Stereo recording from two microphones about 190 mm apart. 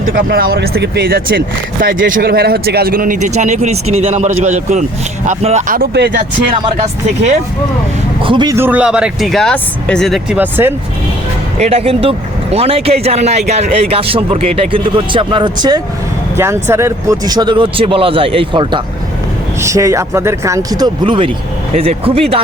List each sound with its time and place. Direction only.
0.0 s speech: 50° right (ahead or behind)
8.2 s speech: 25° right (ahead or behind)
8.5 s speech: 10° right (ahead or behind)
11.6 s speech: 30° right (ahead or behind)